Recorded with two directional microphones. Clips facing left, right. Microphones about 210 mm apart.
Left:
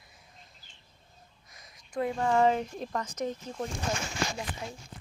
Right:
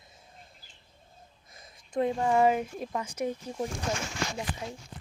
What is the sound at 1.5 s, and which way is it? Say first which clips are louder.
Speech: right 3 dB; 25° right (ahead or behind).